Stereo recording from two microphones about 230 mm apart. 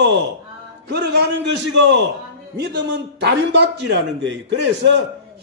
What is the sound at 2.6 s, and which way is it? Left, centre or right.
A man's voice, right.